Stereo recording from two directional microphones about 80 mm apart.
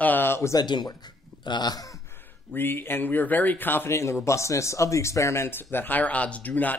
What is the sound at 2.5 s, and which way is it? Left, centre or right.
Speech, left.